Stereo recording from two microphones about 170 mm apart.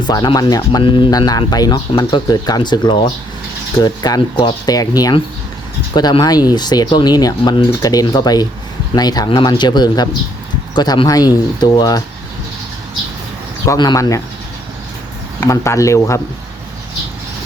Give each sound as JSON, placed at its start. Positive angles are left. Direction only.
{"t": 0.1, "sound": "speech", "side_deg": 25}
{"t": 13.7, "sound": "speech", "side_deg": 20}
{"t": 15.4, "sound": "speech", "side_deg": 15}